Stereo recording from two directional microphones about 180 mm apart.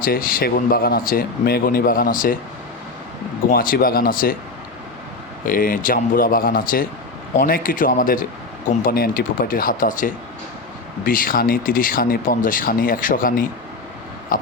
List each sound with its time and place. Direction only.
0.0 s speech: 50° left (ahead or behind)
3.5 s speech: 55° left (ahead or behind)
5.5 s speech: 50° left (ahead or behind)